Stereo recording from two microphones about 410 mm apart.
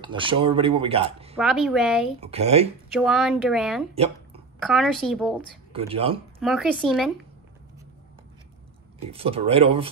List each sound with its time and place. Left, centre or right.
0.0 s speech: centre
1.3 s speech: centre
2.1 s speech: centre
2.9 s speech: centre
3.9 s speech: centre
4.6 s speech: centre
5.7 s speech: centre
6.4 s speech: centre
9.1 s speech: centre